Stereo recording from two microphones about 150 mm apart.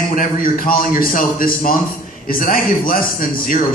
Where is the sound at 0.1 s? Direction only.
65° left (ahead or behind).